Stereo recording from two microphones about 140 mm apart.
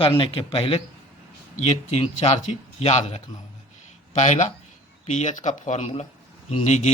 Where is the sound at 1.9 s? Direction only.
50° left (ahead or behind).